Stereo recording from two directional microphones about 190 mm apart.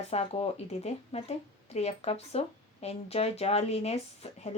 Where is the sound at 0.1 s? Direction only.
30° left (ahead or behind).